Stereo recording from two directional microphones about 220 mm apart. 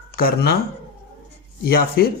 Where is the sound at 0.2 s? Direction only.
40° left (ahead or behind).